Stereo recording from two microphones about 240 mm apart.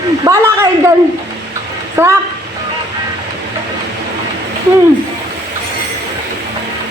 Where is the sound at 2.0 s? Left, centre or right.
Centre.